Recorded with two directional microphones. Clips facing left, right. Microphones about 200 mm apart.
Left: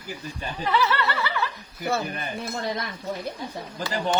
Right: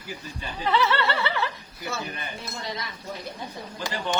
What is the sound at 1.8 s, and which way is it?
Speech, 55° left (ahead or behind).